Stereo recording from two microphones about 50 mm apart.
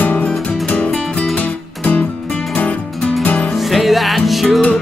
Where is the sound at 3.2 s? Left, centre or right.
Left.